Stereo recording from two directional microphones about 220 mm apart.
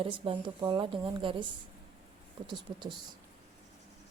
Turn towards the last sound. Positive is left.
turn(degrees=-20)  # may be behind; listen again after turning